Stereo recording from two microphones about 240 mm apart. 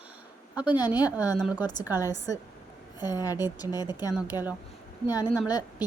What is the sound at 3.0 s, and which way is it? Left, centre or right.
A woman's voice, centre.